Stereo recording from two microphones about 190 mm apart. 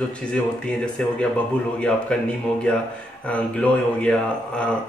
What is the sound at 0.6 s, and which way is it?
Speech, 5° left (ahead or behind).